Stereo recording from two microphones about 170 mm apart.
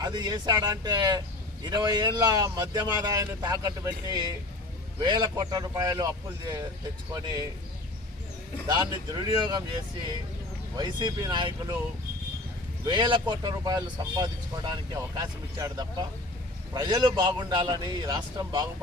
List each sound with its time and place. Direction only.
0.0 s speech: 25° right (ahead or behind)
8.6 s speech: 25° right (ahead or behind)
10.8 s speech: 25° right (ahead or behind)
12.8 s speech: 25° right (ahead or behind)